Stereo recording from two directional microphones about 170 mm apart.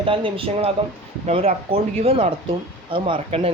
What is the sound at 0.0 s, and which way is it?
Speech, 30° right (ahead or behind).